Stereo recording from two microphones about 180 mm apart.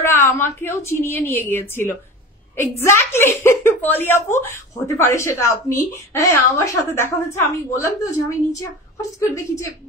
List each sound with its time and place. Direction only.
0.0 s a woman's voice: 15° left (ahead or behind)